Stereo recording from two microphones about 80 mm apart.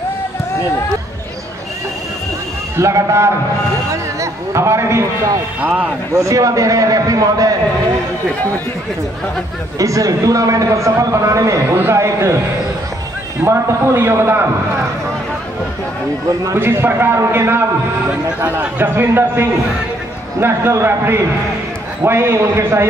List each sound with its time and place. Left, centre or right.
2.8 s a man's voice: right
5.6 s a man's voice: right
6.1 s a man's voice: right
9.8 s a man's voice: right
13.4 s a man's voice: right
16.5 s a man's voice: right